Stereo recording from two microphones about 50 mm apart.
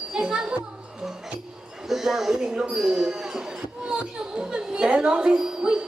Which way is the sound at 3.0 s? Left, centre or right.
Centre.